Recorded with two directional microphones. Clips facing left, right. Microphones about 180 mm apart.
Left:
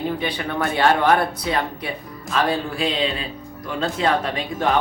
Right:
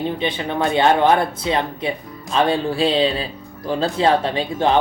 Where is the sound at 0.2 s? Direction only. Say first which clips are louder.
Right 3 dB; 25° right (ahead or behind).